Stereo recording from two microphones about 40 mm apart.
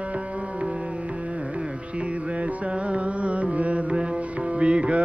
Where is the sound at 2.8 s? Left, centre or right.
Right.